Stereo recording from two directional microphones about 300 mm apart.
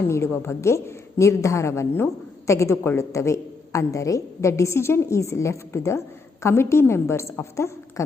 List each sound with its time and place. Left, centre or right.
0.0 s a woman's voice: centre